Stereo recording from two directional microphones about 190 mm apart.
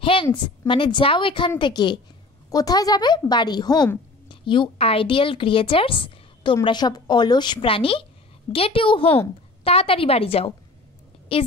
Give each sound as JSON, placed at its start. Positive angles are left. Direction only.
{"t": 0.0, "sound": "a woman's voice", "side_deg": 25}